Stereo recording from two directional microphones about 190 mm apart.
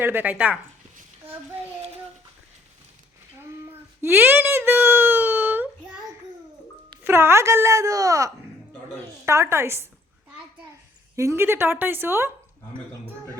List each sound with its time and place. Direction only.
0.0 s speech: 10° right (ahead or behind)
3.4 s a sound: 15° right (ahead or behind)
7.0 s speech: 15° right (ahead or behind)
11.2 s speech: 15° right (ahead or behind)